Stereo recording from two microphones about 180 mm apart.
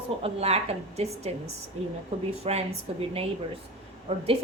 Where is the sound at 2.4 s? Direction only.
35° right (ahead or behind).